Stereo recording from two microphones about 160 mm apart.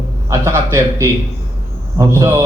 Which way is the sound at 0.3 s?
15° right (ahead or behind).